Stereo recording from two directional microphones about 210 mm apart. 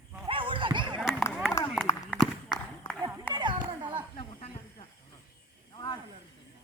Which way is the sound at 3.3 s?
25° right (ahead or behind).